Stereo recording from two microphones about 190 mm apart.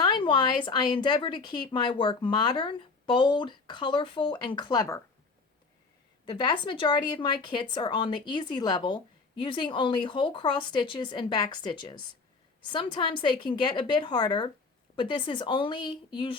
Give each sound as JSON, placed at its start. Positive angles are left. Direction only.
{"t": 0.0, "sound": "speech", "side_deg": 25}
{"t": 6.2, "sound": "speech", "side_deg": 25}